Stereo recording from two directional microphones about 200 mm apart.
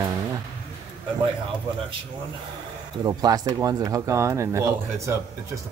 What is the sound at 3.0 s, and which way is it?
Speech, 20° right (ahead or behind).